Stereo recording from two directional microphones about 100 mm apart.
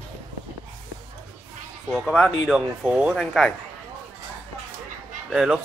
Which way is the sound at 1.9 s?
Centre (ahead or behind).